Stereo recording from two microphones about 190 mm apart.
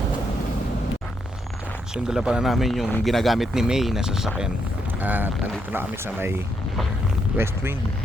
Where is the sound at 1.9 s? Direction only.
5° right (ahead or behind).